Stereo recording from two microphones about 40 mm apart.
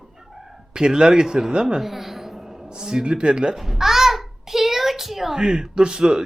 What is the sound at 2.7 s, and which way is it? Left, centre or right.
Speech, centre.